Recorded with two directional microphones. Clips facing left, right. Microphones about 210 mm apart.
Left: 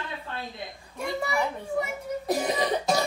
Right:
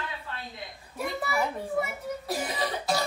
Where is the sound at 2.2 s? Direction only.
20° left (ahead or behind).